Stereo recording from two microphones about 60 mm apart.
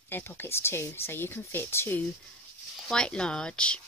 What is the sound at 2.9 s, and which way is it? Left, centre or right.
Speech, centre.